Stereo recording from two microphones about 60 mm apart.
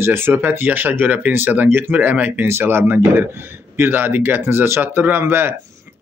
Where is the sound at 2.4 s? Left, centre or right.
Right.